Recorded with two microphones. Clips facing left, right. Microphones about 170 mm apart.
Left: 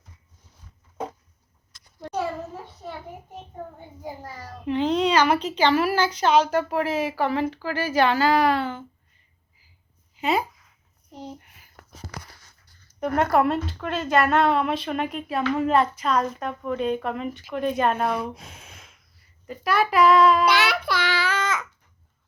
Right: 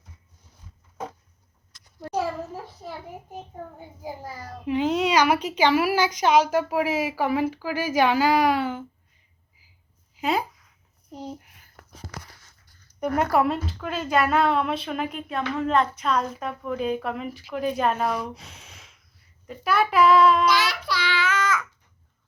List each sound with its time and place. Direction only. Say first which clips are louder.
4.2 s a child's voice: right 1 dB; 10° right (ahead or behind)
10.2 s speech: left 1 dB; centre (ahead or behind)
11.3 s a sound: right 1 dB; centre (ahead or behind)
13.0 s a woman's voice: left 1 dB; centre (ahead or behind)
18.3 s speech: left 2 dB; 50° left (ahead or behind)
19.5 s a woman's voice: even; centre (ahead or behind)
20.4 s speech: left 1 dB; 65° left (ahead or behind); by 21.7 s 25° left (ahead or behind)